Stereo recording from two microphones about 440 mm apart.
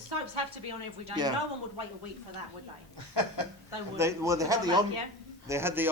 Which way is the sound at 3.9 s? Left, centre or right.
Centre.